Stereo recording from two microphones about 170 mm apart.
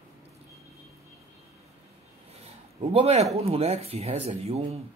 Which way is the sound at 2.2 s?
35° right (ahead or behind).